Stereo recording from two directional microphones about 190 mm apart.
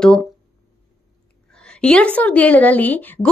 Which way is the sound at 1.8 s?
5° left (ahead or behind).